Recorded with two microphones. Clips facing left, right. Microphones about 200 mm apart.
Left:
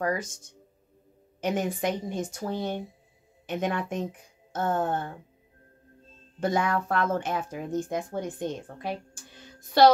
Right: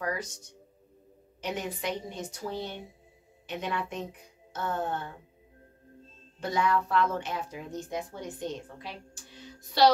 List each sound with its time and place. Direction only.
0.0 s speech: 50° left (ahead or behind)
6.4 s speech: 50° left (ahead or behind)